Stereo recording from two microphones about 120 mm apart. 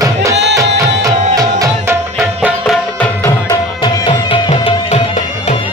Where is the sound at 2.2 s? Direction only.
Centre (ahead or behind).